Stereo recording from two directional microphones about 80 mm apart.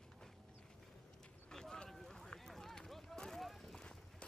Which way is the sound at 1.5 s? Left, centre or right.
Centre.